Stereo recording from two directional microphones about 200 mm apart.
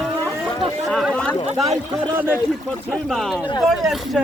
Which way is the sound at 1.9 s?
10° right (ahead or behind).